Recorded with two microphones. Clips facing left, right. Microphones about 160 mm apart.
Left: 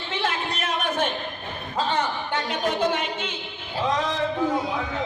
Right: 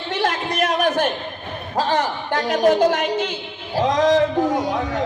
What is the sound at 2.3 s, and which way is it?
Speech, 90° right.